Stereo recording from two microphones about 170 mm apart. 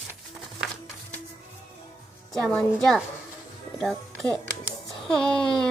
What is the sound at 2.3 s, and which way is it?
Speech, 5° left (ahead or behind).